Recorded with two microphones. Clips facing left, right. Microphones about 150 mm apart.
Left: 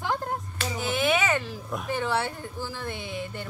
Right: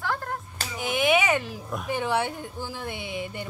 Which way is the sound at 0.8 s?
15° right (ahead or behind).